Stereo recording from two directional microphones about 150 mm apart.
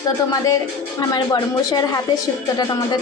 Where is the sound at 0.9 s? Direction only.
25° left (ahead or behind).